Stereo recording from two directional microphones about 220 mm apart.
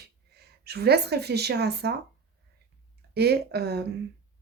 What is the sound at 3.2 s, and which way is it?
Speech, 45° right (ahead or behind).